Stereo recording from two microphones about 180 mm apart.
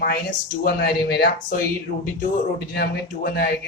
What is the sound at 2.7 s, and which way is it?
Speech, 60° left (ahead or behind).